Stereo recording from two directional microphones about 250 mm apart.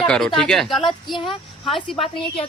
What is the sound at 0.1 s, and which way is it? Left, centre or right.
A woman's voice, centre.